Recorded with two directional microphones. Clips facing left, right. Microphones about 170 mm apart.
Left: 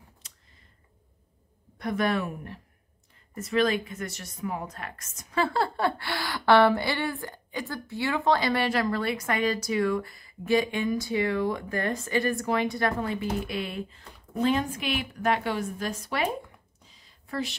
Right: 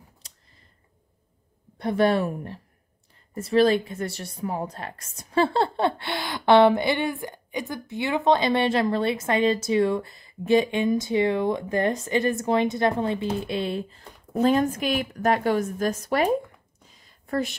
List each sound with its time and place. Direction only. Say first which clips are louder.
0.2 s a sound: right 2 dB; 35° right (ahead or behind)
1.8 s a woman's voice: right 6 dB; 30° right (ahead or behind)
17.3 s a woman's voice: right 5 dB; 50° right (ahead or behind)